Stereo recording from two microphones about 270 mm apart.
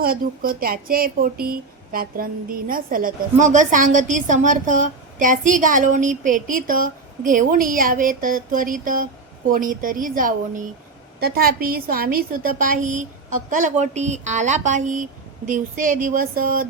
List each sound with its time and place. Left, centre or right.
0.0 s speech: right